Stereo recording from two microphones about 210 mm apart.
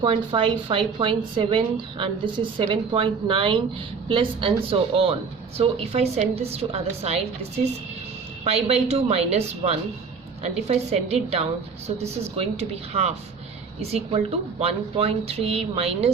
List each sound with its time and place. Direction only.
0.0 s a woman's voice: 25° right (ahead or behind)
8.4 s a woman's voice: 30° right (ahead or behind)